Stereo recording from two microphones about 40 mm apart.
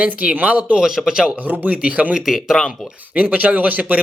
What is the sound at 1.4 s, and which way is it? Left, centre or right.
Speech, right.